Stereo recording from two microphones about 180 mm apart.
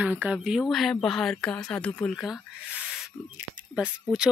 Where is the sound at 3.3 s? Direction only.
5° right (ahead or behind).